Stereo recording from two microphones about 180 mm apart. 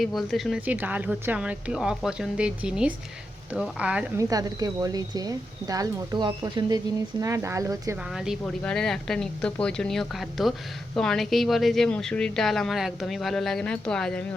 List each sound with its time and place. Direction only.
0.0 s speech: centre (ahead or behind)
4.2 s speech: 20° right (ahead or behind)
8.1 s speech: 5° right (ahead or behind)